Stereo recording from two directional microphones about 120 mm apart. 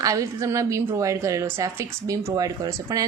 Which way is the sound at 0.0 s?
30° right (ahead or behind).